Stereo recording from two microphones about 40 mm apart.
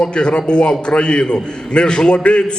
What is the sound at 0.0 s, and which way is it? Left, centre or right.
A man's voice, left.